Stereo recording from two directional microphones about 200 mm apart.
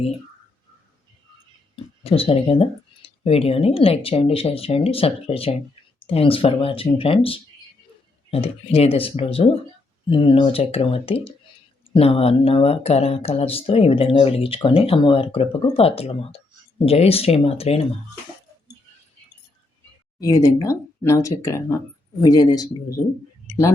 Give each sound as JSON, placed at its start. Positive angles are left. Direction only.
{"t": 1.7, "sound": "speech", "side_deg": 25}
{"t": 20.4, "sound": "speech", "side_deg": 15}